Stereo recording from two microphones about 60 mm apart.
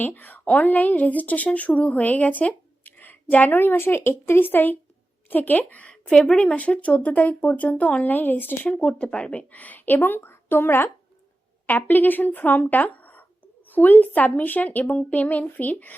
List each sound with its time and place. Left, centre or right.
0.1 s speech: left
5.9 s speech: centre; by 8.7 s left
8.7 s speech: centre